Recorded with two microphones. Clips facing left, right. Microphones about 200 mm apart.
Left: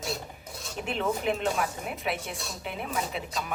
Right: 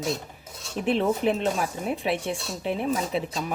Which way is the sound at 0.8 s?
35° right (ahead or behind).